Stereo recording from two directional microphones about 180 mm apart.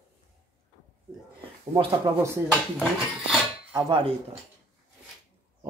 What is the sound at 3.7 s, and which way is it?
Dishes, 25° right (ahead or behind).